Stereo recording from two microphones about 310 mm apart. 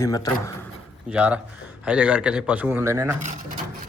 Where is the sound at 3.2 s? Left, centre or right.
Right.